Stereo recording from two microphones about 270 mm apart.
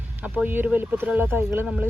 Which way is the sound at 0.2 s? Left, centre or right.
Centre.